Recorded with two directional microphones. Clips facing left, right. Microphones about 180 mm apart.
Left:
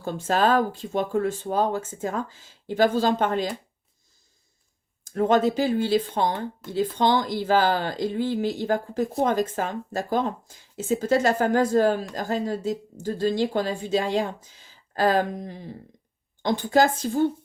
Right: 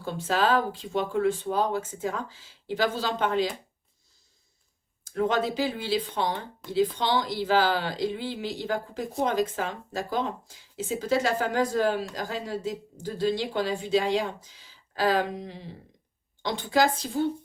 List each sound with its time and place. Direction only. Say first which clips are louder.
0.0 s speech: left 3 dB; 45° left (ahead or behind)
5.0 s speech: left 5 dB; 45° left (ahead or behind)